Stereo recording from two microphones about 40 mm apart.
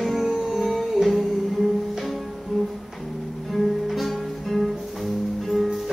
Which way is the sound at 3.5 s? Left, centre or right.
Centre.